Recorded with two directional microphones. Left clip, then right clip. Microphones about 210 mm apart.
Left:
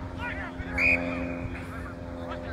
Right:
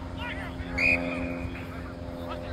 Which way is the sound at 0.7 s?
20° right (ahead or behind).